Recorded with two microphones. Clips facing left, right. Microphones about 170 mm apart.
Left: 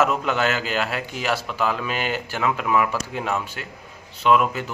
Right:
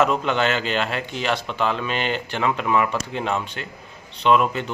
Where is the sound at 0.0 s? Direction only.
5° left (ahead or behind).